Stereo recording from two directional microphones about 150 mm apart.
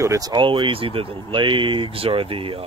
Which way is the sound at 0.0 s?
20° right (ahead or behind).